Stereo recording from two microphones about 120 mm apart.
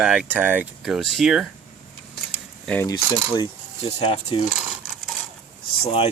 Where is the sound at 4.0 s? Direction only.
60° left (ahead or behind).